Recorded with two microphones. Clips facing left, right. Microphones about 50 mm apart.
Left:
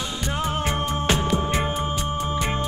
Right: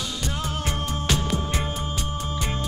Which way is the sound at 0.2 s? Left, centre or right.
Left.